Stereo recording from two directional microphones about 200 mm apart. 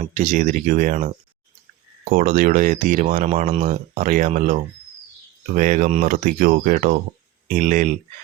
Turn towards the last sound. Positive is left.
turn(degrees=-40)  # may be behind; listen again after turning